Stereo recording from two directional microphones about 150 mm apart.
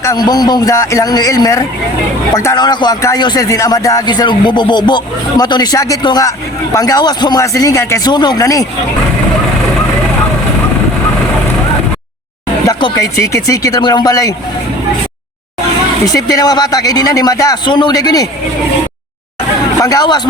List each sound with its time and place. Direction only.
0.0 s speech: 25° left (ahead or behind)
12.6 s speech: 20° left (ahead or behind)
16.1 s speech: 25° left (ahead or behind)
19.8 s speech: 25° left (ahead or behind)